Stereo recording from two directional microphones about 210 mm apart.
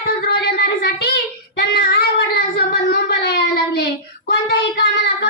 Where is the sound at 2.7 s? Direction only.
50° left (ahead or behind).